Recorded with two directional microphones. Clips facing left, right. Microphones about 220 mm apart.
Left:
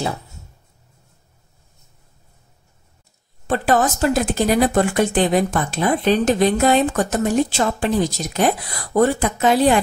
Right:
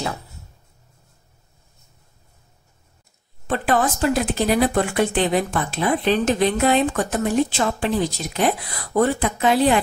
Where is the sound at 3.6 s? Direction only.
45° left (ahead or behind).